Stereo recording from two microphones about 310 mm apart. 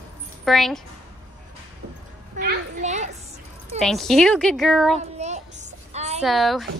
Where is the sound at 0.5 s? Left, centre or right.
Centre.